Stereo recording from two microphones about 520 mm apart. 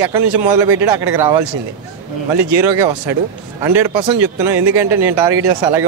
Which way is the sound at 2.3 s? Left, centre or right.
Right.